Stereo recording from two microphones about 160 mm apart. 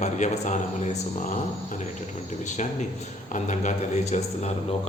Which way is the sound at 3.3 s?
50° left (ahead or behind).